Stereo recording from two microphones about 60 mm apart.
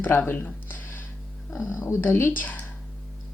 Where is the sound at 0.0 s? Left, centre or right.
Left.